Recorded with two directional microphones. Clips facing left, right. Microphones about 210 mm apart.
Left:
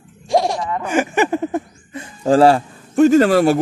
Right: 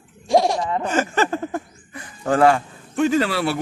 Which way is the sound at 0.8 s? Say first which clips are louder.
Left 5 dB; 15° left (ahead or behind).